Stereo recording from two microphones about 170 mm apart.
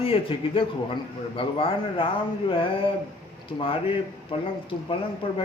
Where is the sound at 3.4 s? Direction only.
30° left (ahead or behind).